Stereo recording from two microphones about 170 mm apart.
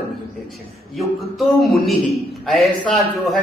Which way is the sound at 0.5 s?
Centre (ahead or behind).